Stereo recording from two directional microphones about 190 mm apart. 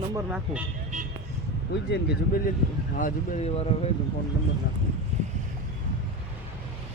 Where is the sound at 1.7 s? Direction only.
60° left (ahead or behind).